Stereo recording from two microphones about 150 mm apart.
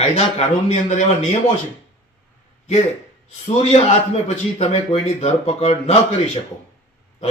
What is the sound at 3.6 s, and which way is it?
A man's voice, 45° left (ahead or behind).